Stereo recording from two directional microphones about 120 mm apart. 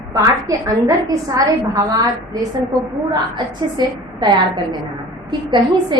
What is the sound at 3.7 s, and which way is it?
A woman's voice, 35° right (ahead or behind).